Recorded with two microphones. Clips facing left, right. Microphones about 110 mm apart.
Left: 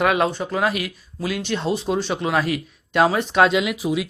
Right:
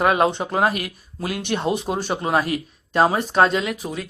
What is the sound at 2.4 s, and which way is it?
Speech, 40° right (ahead or behind).